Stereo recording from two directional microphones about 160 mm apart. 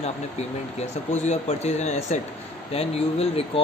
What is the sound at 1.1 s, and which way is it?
Speech, 45° left (ahead or behind).